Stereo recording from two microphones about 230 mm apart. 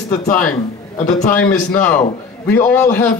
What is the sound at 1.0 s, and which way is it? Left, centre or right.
Speech, left.